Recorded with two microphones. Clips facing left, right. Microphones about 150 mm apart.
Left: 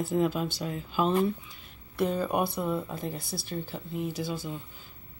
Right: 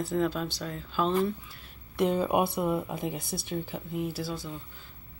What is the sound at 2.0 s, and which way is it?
Speech, 20° right (ahead or behind).